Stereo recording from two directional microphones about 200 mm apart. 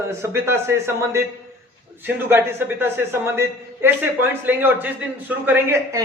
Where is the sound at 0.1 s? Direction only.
15° right (ahead or behind).